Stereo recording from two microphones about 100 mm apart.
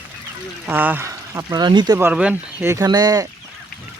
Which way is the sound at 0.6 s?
20° right (ahead or behind).